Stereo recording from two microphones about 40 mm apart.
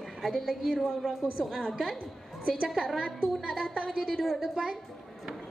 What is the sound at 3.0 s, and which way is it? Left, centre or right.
Speech, right.